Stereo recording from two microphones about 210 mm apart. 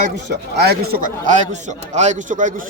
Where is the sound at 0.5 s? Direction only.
50° right (ahead or behind).